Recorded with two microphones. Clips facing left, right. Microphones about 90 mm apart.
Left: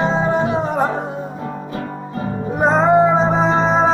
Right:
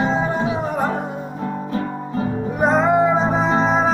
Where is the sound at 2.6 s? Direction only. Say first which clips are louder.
Left 3 dB; 30° left (ahead or behind).